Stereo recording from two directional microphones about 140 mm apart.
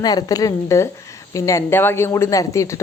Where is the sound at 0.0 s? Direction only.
25° left (ahead or behind).